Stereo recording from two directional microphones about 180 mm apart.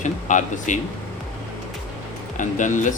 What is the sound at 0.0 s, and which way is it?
Speech, 45° left (ahead or behind).